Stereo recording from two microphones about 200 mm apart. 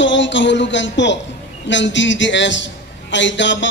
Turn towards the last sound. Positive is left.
turn(degrees=65)  # may be behind; listen again after turning